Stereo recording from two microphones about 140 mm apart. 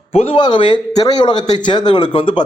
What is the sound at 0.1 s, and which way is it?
A man's voice, 45° left (ahead or behind).